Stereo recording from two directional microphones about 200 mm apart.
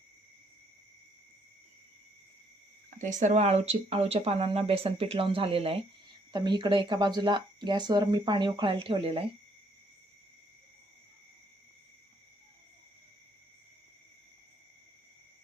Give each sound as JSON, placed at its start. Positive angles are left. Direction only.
{"t": 3.0, "sound": "speech", "side_deg": -35}